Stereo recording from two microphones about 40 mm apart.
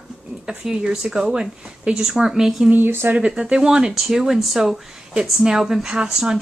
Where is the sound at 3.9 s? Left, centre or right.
Centre.